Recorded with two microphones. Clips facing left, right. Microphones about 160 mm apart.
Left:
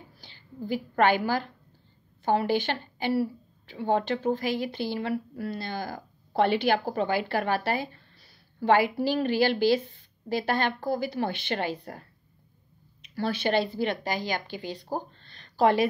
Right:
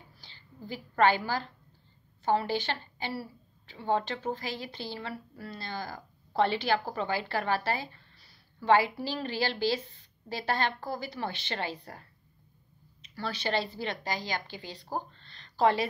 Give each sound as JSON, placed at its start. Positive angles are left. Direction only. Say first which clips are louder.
{"t": 0.2, "sound": "a woman's voice", "louder": "left 9 dB", "side_deg": 55}